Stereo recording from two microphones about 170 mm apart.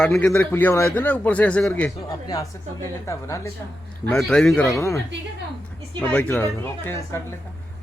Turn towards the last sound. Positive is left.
turn(degrees=15)  # may be behind; listen again after turning